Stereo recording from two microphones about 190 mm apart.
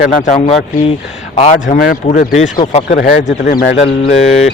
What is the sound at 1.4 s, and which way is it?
Speech, 40° left (ahead or behind).